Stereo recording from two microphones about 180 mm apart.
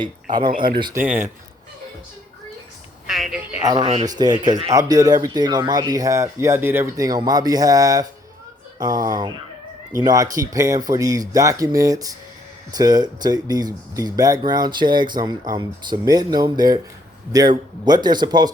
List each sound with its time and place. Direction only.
0.0 s speech: 25° right (ahead or behind)
0.9 s speech: 10° right (ahead or behind)
3.1 s speech: centre (ahead or behind)
3.6 s speech: 20° right (ahead or behind)